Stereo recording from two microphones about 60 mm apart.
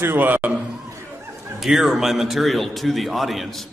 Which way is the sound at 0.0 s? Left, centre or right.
Right.